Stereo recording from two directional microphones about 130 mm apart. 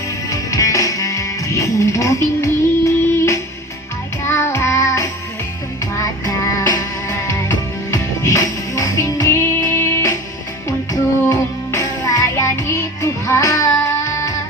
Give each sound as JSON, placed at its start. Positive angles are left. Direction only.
{"t": 0.3, "sound": "music", "side_deg": 25}
{"t": 4.2, "sound": "child singing", "side_deg": 20}
{"t": 5.8, "sound": "music", "side_deg": 25}